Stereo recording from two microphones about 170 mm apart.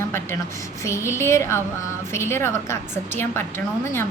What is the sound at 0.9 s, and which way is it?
A woman's voice, 15° left (ahead or behind).